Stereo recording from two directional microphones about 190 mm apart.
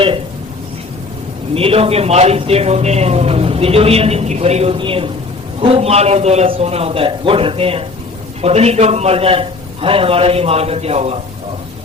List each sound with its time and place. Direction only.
1.5 s a man's voice: 30° right (ahead or behind)